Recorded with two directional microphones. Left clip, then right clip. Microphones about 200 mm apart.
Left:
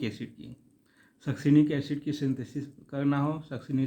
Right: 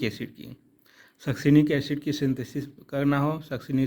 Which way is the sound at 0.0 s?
35° right (ahead or behind).